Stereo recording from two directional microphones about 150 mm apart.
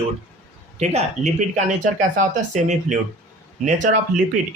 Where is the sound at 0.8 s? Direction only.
50° right (ahead or behind).